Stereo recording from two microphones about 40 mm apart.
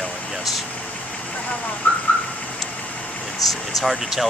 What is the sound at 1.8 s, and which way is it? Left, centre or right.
Car alarm, left.